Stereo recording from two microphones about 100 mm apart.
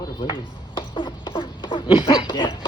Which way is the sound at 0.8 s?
55° left (ahead or behind).